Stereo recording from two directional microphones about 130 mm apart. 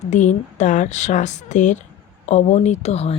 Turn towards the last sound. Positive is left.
turn(degrees=55)  # may be behind; listen again after turning